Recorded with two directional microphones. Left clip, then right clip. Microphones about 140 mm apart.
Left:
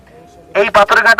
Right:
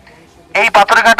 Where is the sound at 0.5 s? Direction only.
20° right (ahead or behind).